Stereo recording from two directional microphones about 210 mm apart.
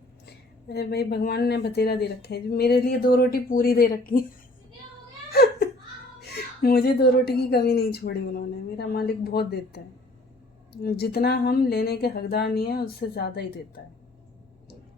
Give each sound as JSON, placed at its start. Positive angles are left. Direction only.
{"t": 0.7, "sound": "a woman's voice", "side_deg": 50}
{"t": 5.3, "sound": "laughter", "side_deg": 50}
{"t": 6.2, "sound": "a woman's voice", "side_deg": 50}